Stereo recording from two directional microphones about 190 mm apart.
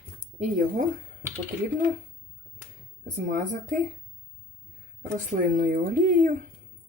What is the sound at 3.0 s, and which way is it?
Speech, 45° right (ahead or behind).